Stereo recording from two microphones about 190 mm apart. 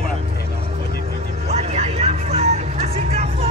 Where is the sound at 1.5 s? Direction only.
35° right (ahead or behind).